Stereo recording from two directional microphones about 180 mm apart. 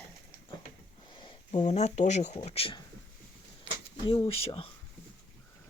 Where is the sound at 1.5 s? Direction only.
40° left (ahead or behind).